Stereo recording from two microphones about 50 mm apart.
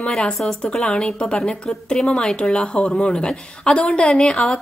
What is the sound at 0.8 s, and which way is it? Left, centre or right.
A woman's voice, centre.